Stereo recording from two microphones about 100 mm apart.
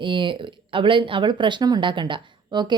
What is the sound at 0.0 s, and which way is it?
A woman's voice, 55° right (ahead or behind).